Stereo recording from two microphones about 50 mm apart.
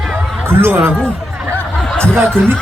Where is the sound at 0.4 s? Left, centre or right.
Right.